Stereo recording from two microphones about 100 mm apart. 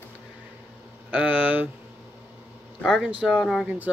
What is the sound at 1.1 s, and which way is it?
Speech, 15° right (ahead or behind).